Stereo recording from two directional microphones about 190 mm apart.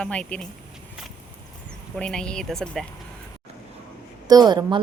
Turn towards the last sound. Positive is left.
turn(degrees=-20)  # may be behind; listen again after turning